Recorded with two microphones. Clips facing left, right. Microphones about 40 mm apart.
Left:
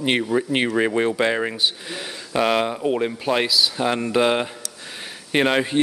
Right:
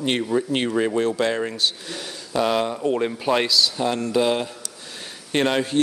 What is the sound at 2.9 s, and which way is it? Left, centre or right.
Speech, centre.